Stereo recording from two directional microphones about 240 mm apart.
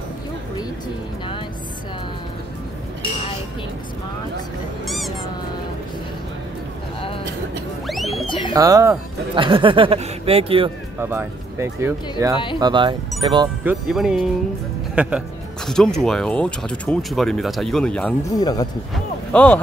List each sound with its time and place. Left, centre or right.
4.8 s music: centre
7.8 s music: centre
8.3 s bird: left
8.5 s speech: centre
11.0 s speech: centre
13.7 s speech: centre
18.4 s speech: centre
19.3 s speech: centre